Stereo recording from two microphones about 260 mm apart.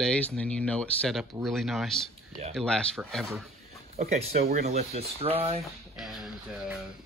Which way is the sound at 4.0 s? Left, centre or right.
Right.